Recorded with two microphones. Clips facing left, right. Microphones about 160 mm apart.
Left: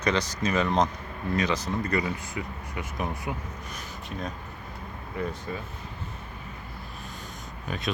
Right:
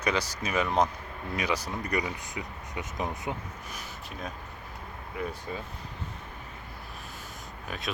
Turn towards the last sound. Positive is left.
turn(degrees=0)  # may be behind; listen again after turning